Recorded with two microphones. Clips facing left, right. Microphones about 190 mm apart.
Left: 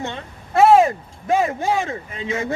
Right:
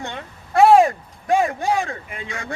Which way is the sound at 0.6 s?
Centre (ahead or behind).